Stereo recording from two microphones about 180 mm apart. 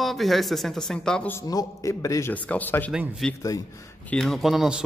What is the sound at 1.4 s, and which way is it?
Speech, 20° left (ahead or behind).